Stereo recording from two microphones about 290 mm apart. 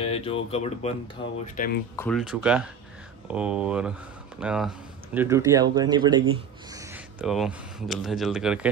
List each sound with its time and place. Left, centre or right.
0.0 s speech: centre
2.0 s speech: centre